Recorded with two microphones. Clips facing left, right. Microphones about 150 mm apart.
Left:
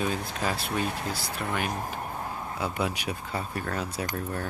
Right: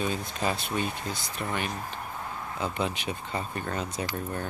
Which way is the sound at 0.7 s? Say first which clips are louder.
Left 1 dB; 65° left (ahead or behind).